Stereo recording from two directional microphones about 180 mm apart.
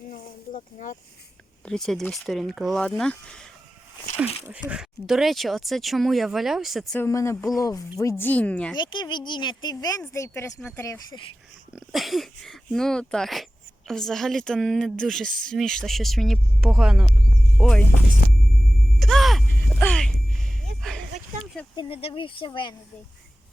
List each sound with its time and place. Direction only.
0.1 s a sound: 45° left (ahead or behind)
1.6 s speech: 5° left (ahead or behind)
4.4 s speech: 5° right (ahead or behind)
7.0 s speech: 15° left (ahead or behind)
8.7 s speech: 25° left (ahead or behind)
11.7 s speech: centre (ahead or behind)
18.9 s a sound: centre (ahead or behind)
21.8 s speech: 30° left (ahead or behind)